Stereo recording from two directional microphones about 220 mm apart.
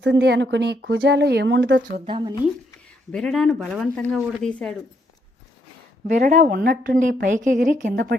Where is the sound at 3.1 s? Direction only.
Centre (ahead or behind).